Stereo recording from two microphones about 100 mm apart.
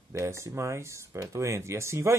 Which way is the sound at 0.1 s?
30° right (ahead or behind).